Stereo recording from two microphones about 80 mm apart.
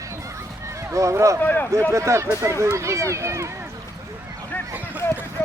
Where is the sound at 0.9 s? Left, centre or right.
Right.